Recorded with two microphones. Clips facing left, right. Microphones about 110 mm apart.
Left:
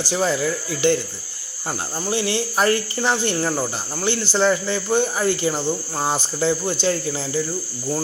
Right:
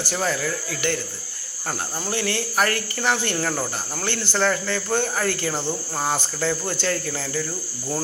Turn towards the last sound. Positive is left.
turn(degrees=20)  # may be behind; listen again after turning